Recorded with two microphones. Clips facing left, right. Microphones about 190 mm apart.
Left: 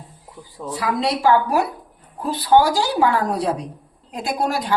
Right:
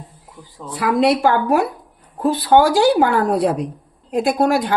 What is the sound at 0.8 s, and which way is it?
A woman's voice, 55° right (ahead or behind).